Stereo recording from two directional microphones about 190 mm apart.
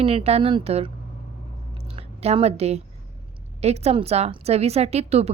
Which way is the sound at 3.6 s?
35° right (ahead or behind).